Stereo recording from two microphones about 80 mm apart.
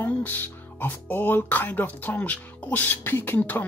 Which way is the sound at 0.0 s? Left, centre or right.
Left.